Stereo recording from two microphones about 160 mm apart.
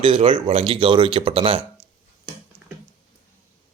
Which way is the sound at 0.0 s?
35° right (ahead or behind).